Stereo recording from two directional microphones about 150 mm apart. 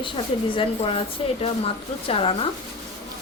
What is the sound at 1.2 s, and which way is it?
Speech, 35° left (ahead or behind).